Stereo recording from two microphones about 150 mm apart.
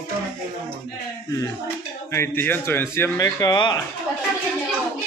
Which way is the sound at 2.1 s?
15° left (ahead or behind).